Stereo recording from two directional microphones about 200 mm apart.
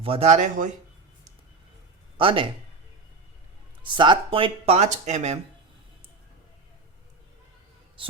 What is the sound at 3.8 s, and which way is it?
Speech, 25° right (ahead or behind).